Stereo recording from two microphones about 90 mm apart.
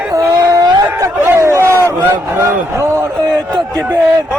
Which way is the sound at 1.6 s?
25° left (ahead or behind).